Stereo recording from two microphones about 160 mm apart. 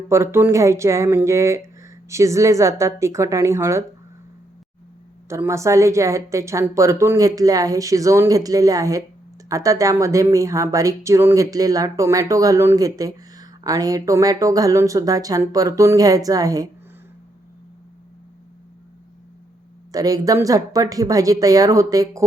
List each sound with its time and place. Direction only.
0.1 s speech: 15° right (ahead or behind)
5.3 s speech: 20° right (ahead or behind)
19.9 s speech: 20° right (ahead or behind)